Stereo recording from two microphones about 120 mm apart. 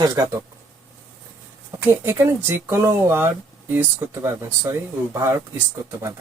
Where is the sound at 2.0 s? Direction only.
20° right (ahead or behind).